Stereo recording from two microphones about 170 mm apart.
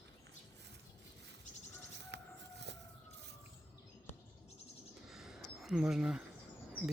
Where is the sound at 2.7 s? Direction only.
90° right.